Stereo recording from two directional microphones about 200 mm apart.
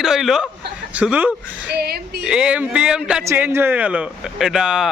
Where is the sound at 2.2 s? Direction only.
5° right (ahead or behind).